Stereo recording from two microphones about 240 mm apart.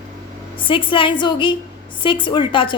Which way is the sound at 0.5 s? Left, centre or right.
Left.